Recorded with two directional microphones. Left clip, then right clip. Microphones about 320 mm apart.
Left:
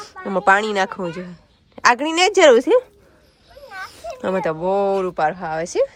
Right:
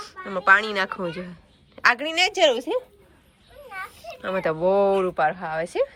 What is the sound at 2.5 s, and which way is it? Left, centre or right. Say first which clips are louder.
Speech: left 11 dB; left.